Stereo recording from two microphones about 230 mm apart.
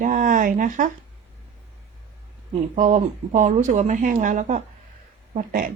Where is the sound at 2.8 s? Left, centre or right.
Right.